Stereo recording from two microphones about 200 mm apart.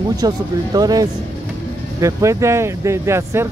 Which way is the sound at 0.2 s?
20° right (ahead or behind).